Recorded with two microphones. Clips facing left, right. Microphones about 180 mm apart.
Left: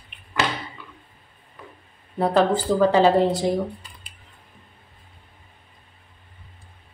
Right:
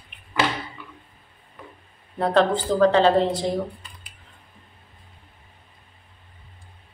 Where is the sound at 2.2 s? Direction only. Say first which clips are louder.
Left 1 dB; 5° left (ahead or behind).